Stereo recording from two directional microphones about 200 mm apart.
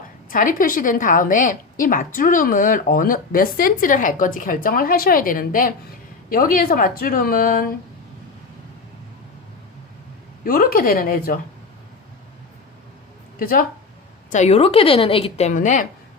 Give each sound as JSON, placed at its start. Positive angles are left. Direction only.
{"t": 0.3, "sound": "a woman's voice", "side_deg": 45}
{"t": 10.4, "sound": "a woman's voice", "side_deg": 45}
{"t": 13.4, "sound": "a woman's voice", "side_deg": 45}
{"t": 14.3, "sound": "a woman's voice", "side_deg": 35}